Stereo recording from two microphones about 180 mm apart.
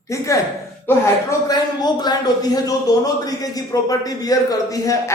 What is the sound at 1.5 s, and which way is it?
A man's voice, 25° left (ahead or behind).